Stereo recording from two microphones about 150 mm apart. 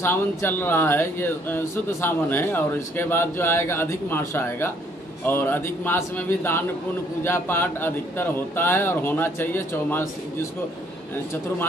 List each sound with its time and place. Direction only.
0.0 s speech: 15° left (ahead or behind)